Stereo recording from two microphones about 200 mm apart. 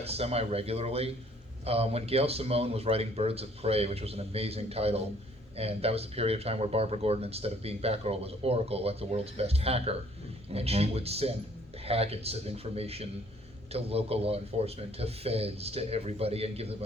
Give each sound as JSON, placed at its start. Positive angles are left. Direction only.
{"t": 0.0, "sound": "speech", "side_deg": -30}